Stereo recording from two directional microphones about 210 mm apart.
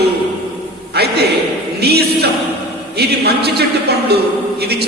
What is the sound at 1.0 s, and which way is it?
A man's voice, 50° right (ahead or behind).